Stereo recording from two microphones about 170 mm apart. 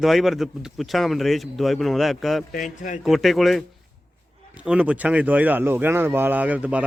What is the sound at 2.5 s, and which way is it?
Speech, 50° left (ahead or behind).